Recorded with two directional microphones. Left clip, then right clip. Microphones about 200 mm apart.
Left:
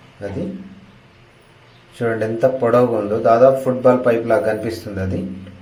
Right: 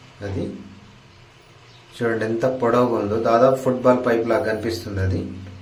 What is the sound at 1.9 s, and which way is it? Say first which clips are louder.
A man's voice: left 2 dB; centre (ahead or behind).